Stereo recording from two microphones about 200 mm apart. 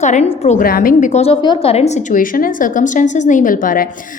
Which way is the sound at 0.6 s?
45° left (ahead or behind).